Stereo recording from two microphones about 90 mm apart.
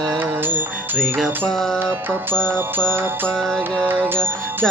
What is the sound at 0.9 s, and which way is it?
Music, 5° left (ahead or behind).